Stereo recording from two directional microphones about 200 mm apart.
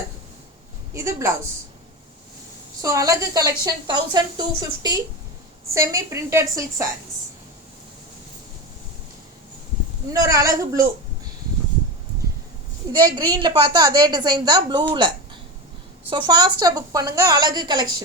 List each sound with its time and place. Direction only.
0.9 s a woman's voice: 15° right (ahead or behind)
2.8 s a woman's voice: 15° right (ahead or behind)
10.1 s a woman's voice: 15° right (ahead or behind)
13.1 s a woman's voice: 25° right (ahead or behind)